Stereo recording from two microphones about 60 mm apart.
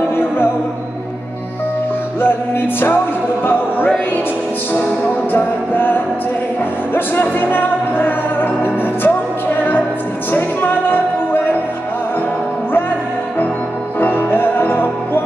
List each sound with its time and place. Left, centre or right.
2.2 s music: left
5.3 s music: left
10.3 s music: left
13.9 s music: left